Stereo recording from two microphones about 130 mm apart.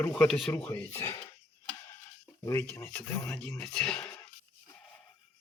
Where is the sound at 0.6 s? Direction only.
15° left (ahead or behind).